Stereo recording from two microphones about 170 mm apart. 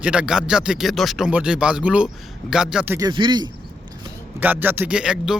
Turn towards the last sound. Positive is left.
turn(degrees=-5)  # may be behind; listen again after turning